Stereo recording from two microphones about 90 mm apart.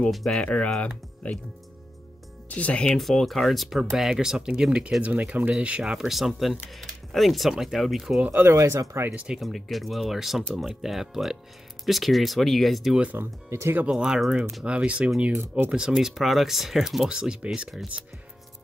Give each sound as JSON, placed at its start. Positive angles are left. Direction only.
{"t": 0.0, "sound": "speech", "side_deg": 5}
{"t": 2.5, "sound": "speech", "side_deg": 15}
{"t": 3.0, "sound": "speech", "side_deg": 0}
{"t": 8.3, "sound": "speech", "side_deg": -30}
{"t": 9.1, "sound": "speech", "side_deg": -15}
{"t": 9.4, "sound": "speech", "side_deg": 0}
{"t": 13.1, "sound": "speech", "side_deg": -30}
{"t": 13.8, "sound": "speech", "side_deg": -5}
{"t": 15.3, "sound": "speech", "side_deg": -25}
{"t": 15.7, "sound": "speech", "side_deg": -5}